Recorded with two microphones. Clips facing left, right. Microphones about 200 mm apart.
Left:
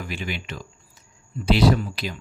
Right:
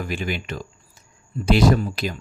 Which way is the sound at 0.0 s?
45° right (ahead or behind).